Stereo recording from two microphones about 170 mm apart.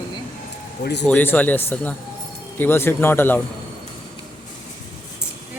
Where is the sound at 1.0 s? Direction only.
10° left (ahead or behind).